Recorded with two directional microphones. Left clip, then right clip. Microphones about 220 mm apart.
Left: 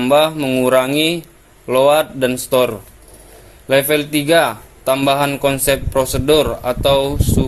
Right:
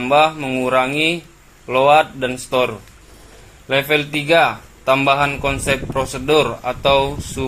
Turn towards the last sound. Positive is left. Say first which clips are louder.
# left 2 dB
turn(degrees=55)  # may be behind; listen again after turning